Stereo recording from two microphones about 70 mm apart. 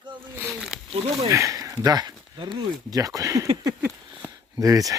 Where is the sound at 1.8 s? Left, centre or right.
Right.